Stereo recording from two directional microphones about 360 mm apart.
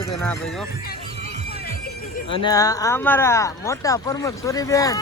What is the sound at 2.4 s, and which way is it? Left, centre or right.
Speech, centre.